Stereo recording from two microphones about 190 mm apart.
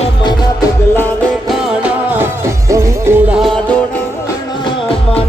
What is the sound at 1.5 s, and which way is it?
Music, centre (ahead or behind).